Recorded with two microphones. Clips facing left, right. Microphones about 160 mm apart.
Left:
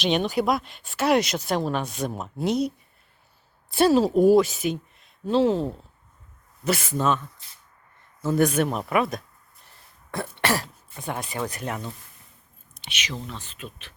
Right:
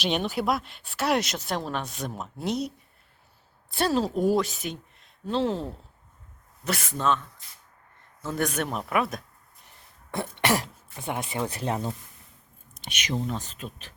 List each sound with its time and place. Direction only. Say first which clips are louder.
0.0 s a woman's voice: left 4 dB; centre (ahead or behind)
6.7 s speech: left 3 dB; 5° left (ahead or behind)
8.2 s speech: left 7 dB; 5° left (ahead or behind)
10.1 s cough: even; 20° right (ahead or behind)
11.0 s speech: even; 25° right (ahead or behind)
12.9 s speech: right 5 dB; 45° right (ahead or behind)